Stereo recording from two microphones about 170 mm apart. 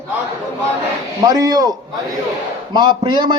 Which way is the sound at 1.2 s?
20° right (ahead or behind).